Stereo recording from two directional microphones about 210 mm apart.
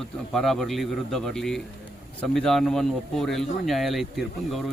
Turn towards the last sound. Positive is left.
turn(degrees=0)  # may be behind; listen again after turning